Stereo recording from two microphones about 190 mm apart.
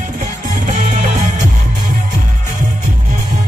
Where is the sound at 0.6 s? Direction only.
40° right (ahead or behind).